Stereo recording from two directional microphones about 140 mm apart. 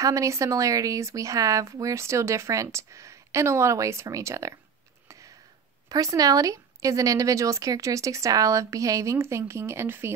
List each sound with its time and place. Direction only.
0.0 s speech: 20° right (ahead or behind)
5.9 s speech: 25° right (ahead or behind)